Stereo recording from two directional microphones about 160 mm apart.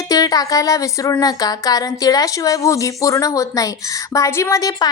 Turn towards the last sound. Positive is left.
turn(degrees=20)  # may be behind; listen again after turning